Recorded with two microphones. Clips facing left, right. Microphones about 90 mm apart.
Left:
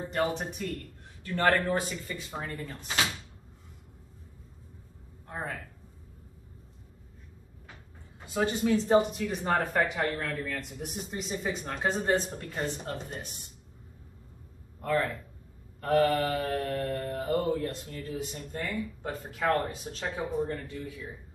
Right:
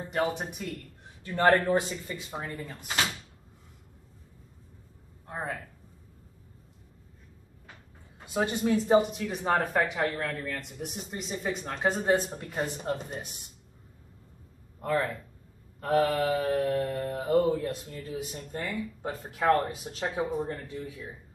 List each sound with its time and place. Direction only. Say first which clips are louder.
0.4 s speech: left 1 dB; 5° right (ahead or behind)
1.2 s a man's voice: right 3 dB; 20° right (ahead or behind)
2.3 s mantra: even; 10° right (ahead or behind)
5.2 s speech: right 2 dB; 15° right (ahead or behind)
8.3 s speech: even; 15° right (ahead or behind)
12.4 s mantra: right 1 dB; 15° right (ahead or behind)
14.8 s speech: even; 15° right (ahead or behind)
15.8 s mantra: even; 10° right (ahead or behind)